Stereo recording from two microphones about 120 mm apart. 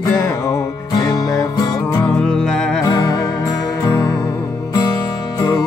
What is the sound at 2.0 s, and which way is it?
Music, 5° left (ahead or behind).